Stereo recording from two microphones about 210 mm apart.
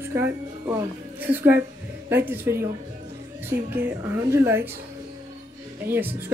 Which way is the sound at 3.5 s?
50° right (ahead or behind).